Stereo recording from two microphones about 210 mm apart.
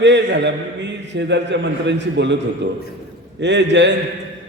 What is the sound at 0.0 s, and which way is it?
A man's voice, 55° right (ahead or behind).